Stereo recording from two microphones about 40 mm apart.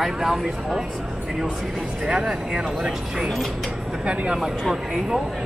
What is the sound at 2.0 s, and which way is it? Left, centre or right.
Speech, centre.